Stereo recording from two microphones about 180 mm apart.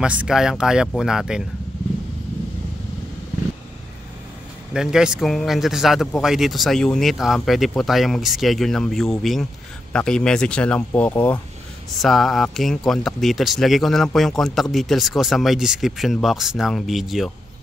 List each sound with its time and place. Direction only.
0.0 s speech: 5° right (ahead or behind)
4.7 s speech: 5° right (ahead or behind)